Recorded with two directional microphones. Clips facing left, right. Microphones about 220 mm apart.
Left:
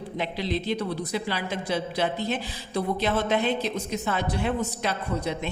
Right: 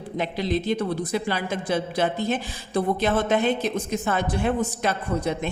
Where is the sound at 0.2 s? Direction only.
45° right (ahead or behind).